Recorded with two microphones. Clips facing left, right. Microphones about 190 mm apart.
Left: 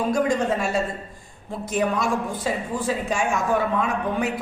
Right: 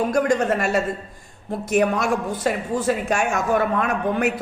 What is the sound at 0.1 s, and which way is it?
A woman's voice, 70° right (ahead or behind).